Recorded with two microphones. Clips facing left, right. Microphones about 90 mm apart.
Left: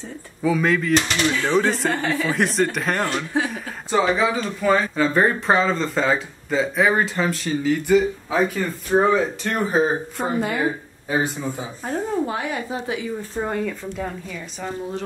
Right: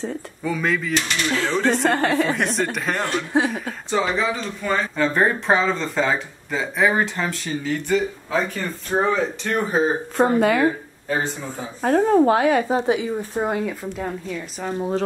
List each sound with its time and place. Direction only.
0.4 s speech: centre (ahead or behind)
2.0 s speech: 40° right (ahead or behind)
2.3 s speech: centre (ahead or behind)
10.1 s speech: 80° right
11.1 s speech: 10° left (ahead or behind)
11.8 s speech: 70° right (ahead or behind)
12.8 s speech: 15° right (ahead or behind)
14.8 s speech: 35° right (ahead or behind)